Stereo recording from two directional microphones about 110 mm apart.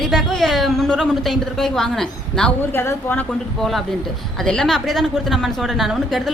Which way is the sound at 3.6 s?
Centre (ahead or behind).